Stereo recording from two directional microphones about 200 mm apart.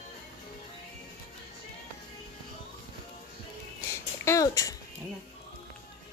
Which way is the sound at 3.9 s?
15° left (ahead or behind).